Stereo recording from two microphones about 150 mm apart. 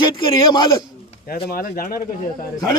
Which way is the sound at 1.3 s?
80° left.